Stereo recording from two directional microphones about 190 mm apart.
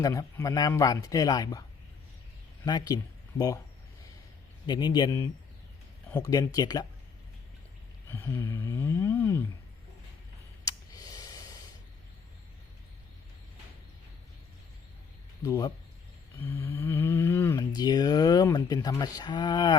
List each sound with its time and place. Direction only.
0.0 s speech: 15° left (ahead or behind)
2.6 s speech: 20° left (ahead or behind)
4.6 s speech: 20° left (ahead or behind)
8.1 s speech: 10° left (ahead or behind)
10.7 s a sound: 20° left (ahead or behind)
15.4 s speech: 15° left (ahead or behind)
16.4 s a sound: 10° left (ahead or behind)
17.7 s speech: 20° left (ahead or behind)